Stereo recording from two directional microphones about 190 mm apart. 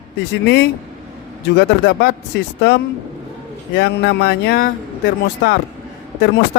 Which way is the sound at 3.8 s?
65° left (ahead or behind).